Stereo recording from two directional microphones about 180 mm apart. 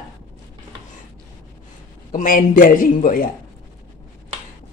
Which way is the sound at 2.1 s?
45° left (ahead or behind).